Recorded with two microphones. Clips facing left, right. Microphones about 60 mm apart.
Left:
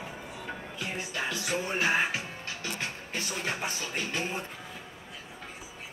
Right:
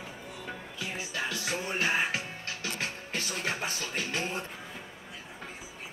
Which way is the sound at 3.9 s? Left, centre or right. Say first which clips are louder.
Even; centre.